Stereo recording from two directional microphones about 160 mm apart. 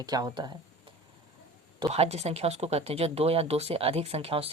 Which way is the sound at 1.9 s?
40° right (ahead or behind).